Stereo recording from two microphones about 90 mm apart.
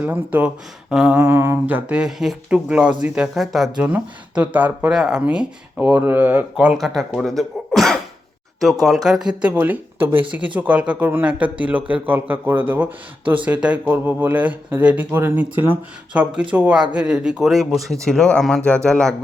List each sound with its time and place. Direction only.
0.0 s speech: 15° right (ahead or behind)
1.1 s a sound: 25° right (ahead or behind); by 2.6 s 5° right (ahead or behind)
2.6 s speech: 15° right (ahead or behind)
3.8 s speech: 15° right (ahead or behind)
4.9 s speech: 5° right (ahead or behind)
5.8 s a sound: 20° right (ahead or behind)
6.7 s speech: centre (ahead or behind)
9.0 s speech: 5° right (ahead or behind)
9.4 s speech: 20° right (ahead or behind)
11.9 s a sound: 20° right (ahead or behind)
13.4 s speech: 15° right (ahead or behind); by 19.1 s 10° left (ahead or behind)